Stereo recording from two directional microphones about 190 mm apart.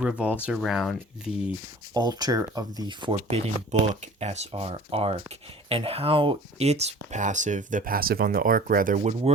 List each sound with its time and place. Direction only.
0.0 s speech: 5° right (ahead or behind)
1.9 s speech: 20° right (ahead or behind); by 9.3 s 40° right (ahead or behind)